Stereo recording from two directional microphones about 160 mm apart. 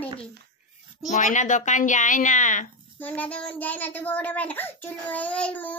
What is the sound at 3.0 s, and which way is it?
A child's voice, 10° left (ahead or behind).